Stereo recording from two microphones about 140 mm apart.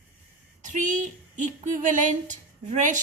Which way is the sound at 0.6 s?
60° right (ahead or behind).